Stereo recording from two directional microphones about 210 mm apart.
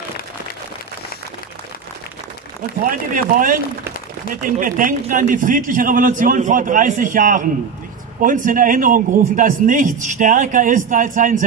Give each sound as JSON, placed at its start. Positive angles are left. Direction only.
{"t": 2.8, "sound": "a man's voice", "side_deg": -40}